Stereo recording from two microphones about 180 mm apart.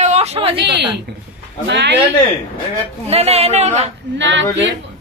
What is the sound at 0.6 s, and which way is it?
A woman's voice, 70° right (ahead or behind).